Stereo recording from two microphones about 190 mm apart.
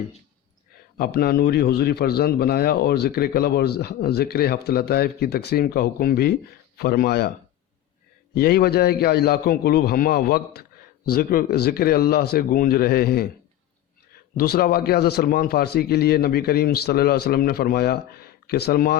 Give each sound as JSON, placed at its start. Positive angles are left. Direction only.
{"t": 0.9, "sound": "a man's voice", "side_deg": 55}
{"t": 8.4, "sound": "a man's voice", "side_deg": 55}
{"t": 14.3, "sound": "a man's voice", "side_deg": 55}